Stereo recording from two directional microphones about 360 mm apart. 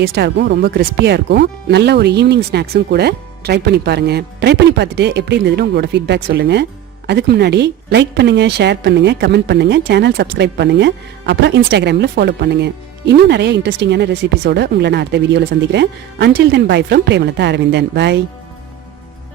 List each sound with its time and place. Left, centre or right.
0.0 s speech: right